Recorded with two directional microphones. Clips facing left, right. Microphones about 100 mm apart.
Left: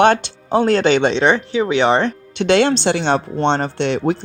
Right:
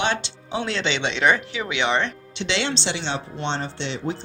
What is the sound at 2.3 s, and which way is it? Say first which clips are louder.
Speech: left 13 dB; 50° left (ahead or behind).